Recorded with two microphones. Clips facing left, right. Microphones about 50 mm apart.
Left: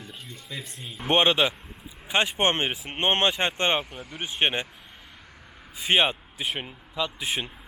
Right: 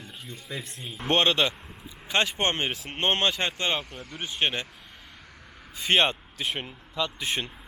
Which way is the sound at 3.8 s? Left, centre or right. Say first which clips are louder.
Left 2 dB; centre.